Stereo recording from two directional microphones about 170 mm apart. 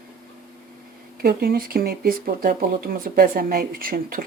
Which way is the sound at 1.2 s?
65° right (ahead or behind).